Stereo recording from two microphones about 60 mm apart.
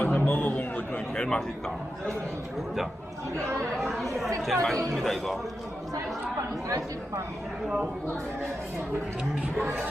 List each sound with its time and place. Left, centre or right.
0.0 s a sound: left
1.1 s a man's voice: centre
3.3 s speech: right
3.8 s speech: centre